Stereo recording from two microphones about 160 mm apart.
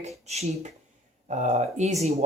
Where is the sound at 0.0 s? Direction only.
40° right (ahead or behind).